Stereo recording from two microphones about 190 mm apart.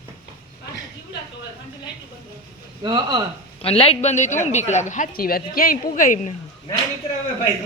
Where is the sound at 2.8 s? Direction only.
20° right (ahead or behind).